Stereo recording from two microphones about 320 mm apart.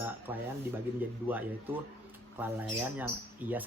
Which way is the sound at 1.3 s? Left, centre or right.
Centre.